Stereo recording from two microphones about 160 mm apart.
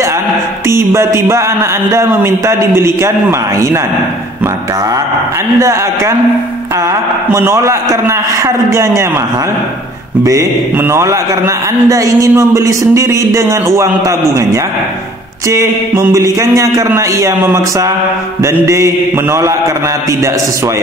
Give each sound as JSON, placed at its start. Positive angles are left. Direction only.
{"t": 0.7, "sound": "a man's voice", "side_deg": -15}
{"t": 5.6, "sound": "a man's voice", "side_deg": -20}
{"t": 10.2, "sound": "a man's voice", "side_deg": -20}